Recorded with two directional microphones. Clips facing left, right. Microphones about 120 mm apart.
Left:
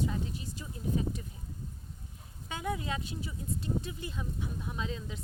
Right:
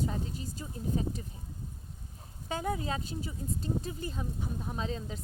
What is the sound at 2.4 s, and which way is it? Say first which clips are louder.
A woman's voice: right 2 dB; 35° right (ahead or behind).